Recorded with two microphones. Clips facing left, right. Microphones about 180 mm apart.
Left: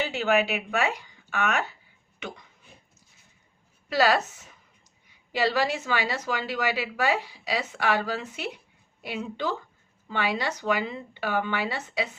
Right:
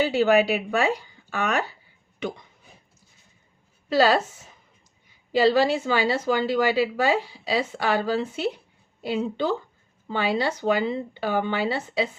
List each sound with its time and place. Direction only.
0.0 s speech: 35° right (ahead or behind)
3.8 s a woman's voice: 30° right (ahead or behind)